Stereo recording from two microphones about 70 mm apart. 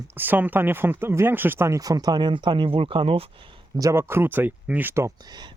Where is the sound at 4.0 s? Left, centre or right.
Right.